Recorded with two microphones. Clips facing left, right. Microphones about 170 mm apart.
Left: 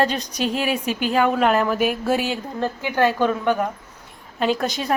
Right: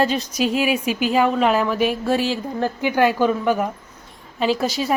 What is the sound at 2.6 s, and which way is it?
A woman's voice, 15° right (ahead or behind).